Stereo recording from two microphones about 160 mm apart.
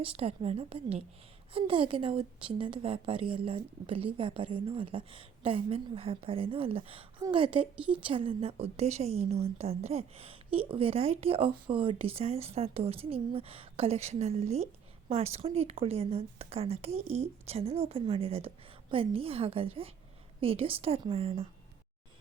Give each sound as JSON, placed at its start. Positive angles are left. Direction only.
{"t": 0.0, "sound": "a woman's voice", "side_deg": -35}